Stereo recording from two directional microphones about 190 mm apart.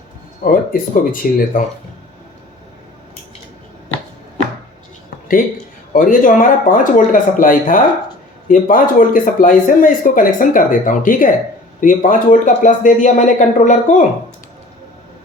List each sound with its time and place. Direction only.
0.4 s speech: 45° left (ahead or behind)
5.9 s speech: 45° left (ahead or behind)